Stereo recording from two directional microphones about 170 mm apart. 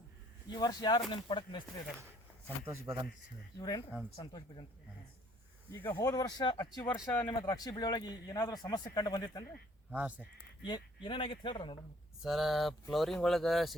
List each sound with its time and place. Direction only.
0.5 s speech: 25° left (ahead or behind)
2.6 s speech: 15° right (ahead or behind)
3.6 s speech: 25° left (ahead or behind)
5.9 s speech: 20° left (ahead or behind)
6.8 s speech: 10° left (ahead or behind)
7.4 s speech: 20° left (ahead or behind)
9.9 s speech: 10° right (ahead or behind)
10.7 s speech: 30° left (ahead or behind)
12.2 s speech: centre (ahead or behind)